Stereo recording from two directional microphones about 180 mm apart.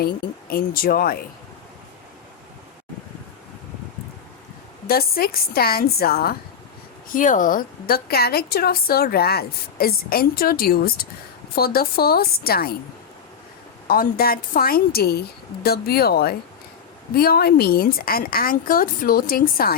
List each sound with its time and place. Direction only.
0.0 s a woman's voice: 55° left (ahead or behind)
4.9 s a woman's voice: 55° left (ahead or behind)
7.1 s a woman's voice: 45° left (ahead or behind)
13.8 s a woman's voice: 55° left (ahead or behind)